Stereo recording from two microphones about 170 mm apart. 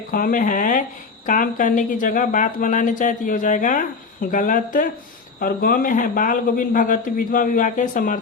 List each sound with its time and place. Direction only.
0.1 s speech: 55° left (ahead or behind)